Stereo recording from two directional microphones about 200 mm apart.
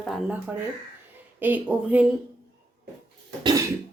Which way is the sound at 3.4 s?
20° right (ahead or behind).